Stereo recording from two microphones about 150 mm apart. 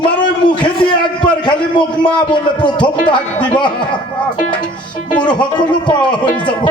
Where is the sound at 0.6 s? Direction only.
30° left (ahead or behind).